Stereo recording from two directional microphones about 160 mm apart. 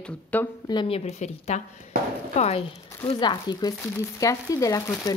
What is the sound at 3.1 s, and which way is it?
Speech, 30° left (ahead or behind).